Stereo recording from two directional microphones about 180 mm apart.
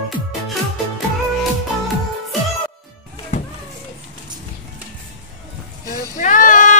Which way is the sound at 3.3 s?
40° left (ahead or behind).